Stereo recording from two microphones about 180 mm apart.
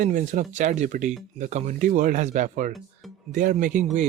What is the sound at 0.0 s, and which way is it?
Speech, 45° right (ahead or behind).